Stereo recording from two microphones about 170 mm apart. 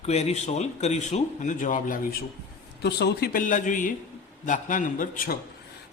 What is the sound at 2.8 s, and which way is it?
A man's voice, 75° left (ahead or behind).